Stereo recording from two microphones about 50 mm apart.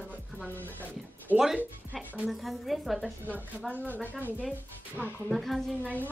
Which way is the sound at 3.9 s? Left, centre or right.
Left.